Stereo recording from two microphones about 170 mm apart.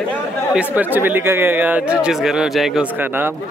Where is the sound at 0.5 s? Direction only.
10° right (ahead or behind).